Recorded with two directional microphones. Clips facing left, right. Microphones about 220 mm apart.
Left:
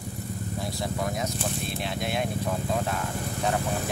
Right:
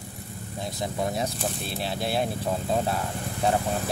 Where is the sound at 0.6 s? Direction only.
20° right (ahead or behind).